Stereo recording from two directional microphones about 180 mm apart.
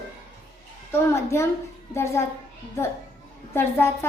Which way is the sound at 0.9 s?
15° left (ahead or behind).